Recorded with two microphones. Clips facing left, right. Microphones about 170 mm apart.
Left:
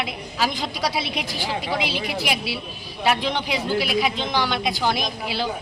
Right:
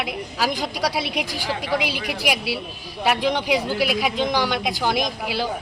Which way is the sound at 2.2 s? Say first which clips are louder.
Right 2 dB; 10° right (ahead or behind).